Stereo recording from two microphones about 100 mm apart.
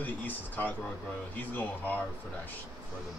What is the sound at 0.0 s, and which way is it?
A man's voice, 20° left (ahead or behind).